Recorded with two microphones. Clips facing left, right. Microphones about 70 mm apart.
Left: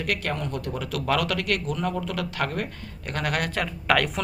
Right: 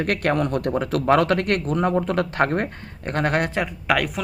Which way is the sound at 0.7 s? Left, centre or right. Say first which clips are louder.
Right 6 dB; right.